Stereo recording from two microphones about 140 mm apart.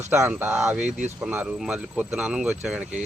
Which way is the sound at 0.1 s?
15° right (ahead or behind).